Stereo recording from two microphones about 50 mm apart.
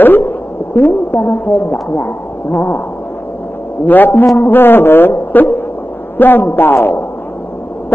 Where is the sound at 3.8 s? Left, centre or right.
Left.